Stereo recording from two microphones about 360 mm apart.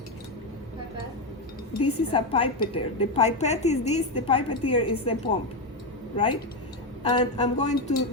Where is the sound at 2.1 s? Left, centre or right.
Centre.